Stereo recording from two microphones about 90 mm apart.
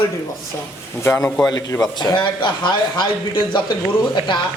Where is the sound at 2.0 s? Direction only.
55° left (ahead or behind).